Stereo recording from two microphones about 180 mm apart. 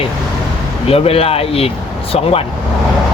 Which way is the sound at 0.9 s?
35° left (ahead or behind).